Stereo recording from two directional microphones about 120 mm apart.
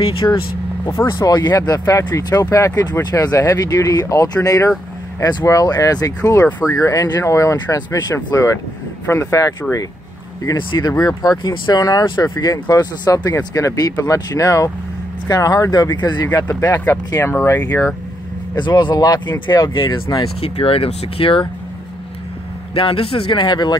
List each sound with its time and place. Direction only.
0.0 s speech: 50° left (ahead or behind)
1.0 s speech: 35° left (ahead or behind)
16.7 s speech: 15° left (ahead or behind)
18.6 s speech: 40° left (ahead or behind)
20.3 s speech: 55° left (ahead or behind)
22.8 s speech: 50° left (ahead or behind)